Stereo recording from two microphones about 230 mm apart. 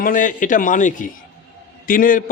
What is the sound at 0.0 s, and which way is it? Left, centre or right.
A man's voice, left.